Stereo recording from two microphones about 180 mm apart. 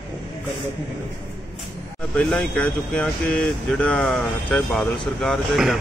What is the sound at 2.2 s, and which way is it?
Speech, 5° left (ahead or behind).